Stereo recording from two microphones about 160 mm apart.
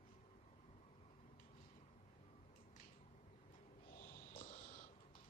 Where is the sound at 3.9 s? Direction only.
65° left (ahead or behind).